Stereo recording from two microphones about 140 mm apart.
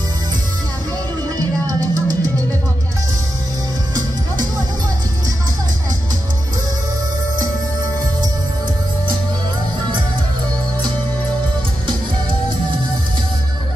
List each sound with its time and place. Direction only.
1.7 s music: 25° right (ahead or behind)